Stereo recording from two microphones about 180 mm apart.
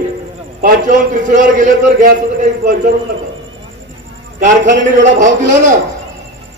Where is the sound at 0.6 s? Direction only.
50° right (ahead or behind).